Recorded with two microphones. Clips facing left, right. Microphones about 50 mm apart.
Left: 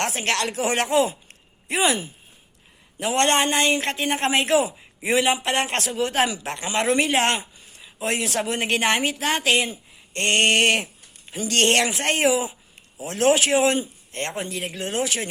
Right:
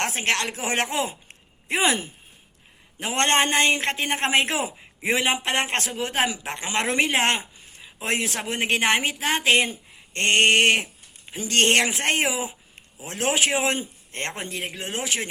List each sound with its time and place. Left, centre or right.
0.0 s speech: right
14.7 s speech: centre